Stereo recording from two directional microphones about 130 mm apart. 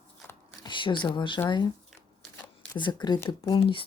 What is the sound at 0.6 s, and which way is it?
Speech, 40° left (ahead or behind).